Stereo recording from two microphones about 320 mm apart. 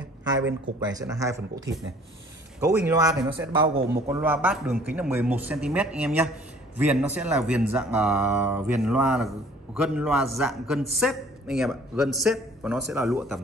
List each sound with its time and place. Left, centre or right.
0.4 s speech: right
0.8 s a man's voice: centre
2.6 s a man's voice: centre